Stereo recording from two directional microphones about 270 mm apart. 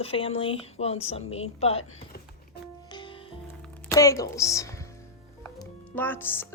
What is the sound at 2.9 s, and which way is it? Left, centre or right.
Music, centre.